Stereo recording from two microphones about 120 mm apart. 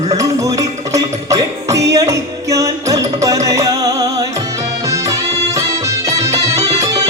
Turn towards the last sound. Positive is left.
turn(degrees=-30)  # may be behind; listen again after turning